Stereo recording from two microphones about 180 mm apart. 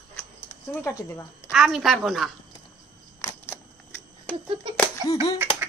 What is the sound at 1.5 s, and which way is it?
Speech, centre (ahead or behind).